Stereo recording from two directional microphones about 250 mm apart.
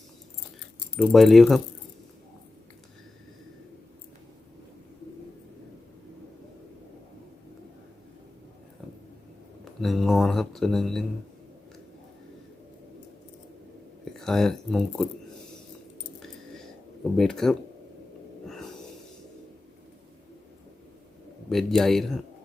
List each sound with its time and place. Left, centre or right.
0.9 s speech: centre
9.6 s a sound: centre
14.0 s speech: centre
16.2 s cash register: centre
18.4 s snort: centre
21.5 s speech: centre